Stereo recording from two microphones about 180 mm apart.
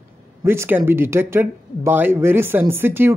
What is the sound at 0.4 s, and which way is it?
Speech, 15° right (ahead or behind).